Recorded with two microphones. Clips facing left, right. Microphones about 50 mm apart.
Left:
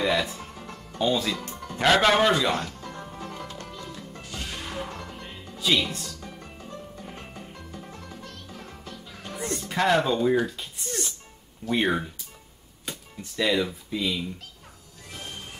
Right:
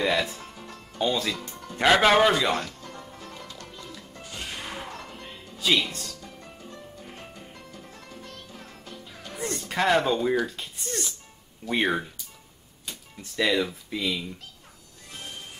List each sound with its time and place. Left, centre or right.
0.0 s music: centre
1.0 s a man's voice: centre
2.5 s music: centre
3.0 s music: left
4.3 s music: centre
5.6 s speech: centre
7.1 s music: centre
9.3 s music: centre
9.8 s a man's voice: centre
11.7 s a man's voice: centre
13.4 s speech: centre